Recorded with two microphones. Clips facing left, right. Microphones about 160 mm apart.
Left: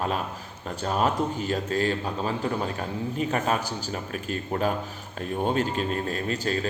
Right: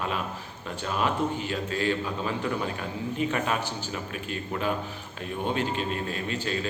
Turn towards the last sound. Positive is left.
turn(degrees=40)  # may be behind; listen again after turning